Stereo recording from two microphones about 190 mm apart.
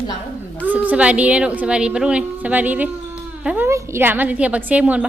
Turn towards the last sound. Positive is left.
turn(degrees=-5)  # may be behind; listen again after turning